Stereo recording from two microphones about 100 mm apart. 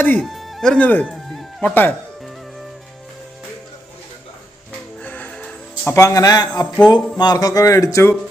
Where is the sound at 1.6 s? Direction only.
20° left (ahead or behind).